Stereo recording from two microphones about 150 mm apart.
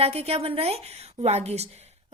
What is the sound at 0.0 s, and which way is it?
A woman's voice, 40° right (ahead or behind).